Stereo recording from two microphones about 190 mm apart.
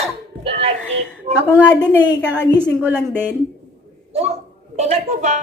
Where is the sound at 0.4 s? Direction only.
30° right (ahead or behind).